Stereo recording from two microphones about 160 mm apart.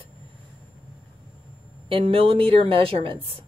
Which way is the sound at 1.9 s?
35° right (ahead or behind).